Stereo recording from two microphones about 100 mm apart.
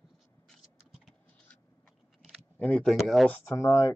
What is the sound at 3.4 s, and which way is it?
Speech, 30° left (ahead or behind).